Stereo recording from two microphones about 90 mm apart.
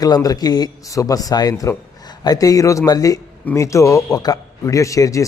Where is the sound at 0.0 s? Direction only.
45° left (ahead or behind).